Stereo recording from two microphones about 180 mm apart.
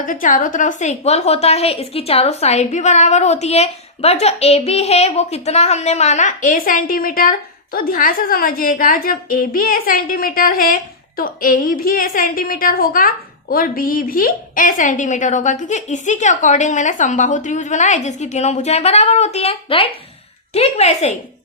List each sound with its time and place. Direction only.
0.0 s a woman's voice: 50° left (ahead or behind)